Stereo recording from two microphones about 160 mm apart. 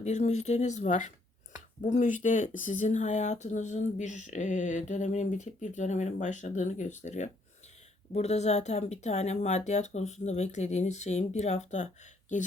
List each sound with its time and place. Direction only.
0.0 s speech: 45° left (ahead or behind)